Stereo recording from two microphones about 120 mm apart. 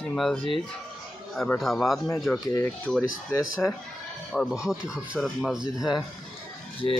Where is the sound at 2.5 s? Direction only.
25° left (ahead or behind).